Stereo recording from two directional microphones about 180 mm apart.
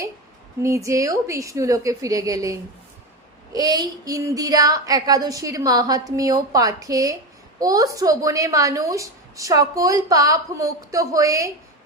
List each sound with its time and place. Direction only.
0.6 s a woman's voice: 15° right (ahead or behind)